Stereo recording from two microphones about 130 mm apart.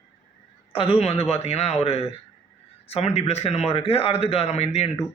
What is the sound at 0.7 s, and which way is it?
A man's voice, 45° left (ahead or behind).